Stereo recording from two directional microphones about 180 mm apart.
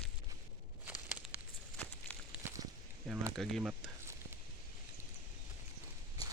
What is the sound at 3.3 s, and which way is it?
Speech, centre (ahead or behind).